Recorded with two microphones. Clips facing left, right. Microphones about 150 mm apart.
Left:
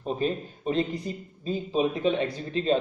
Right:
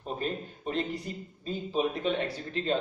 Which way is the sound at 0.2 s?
20° left (ahead or behind).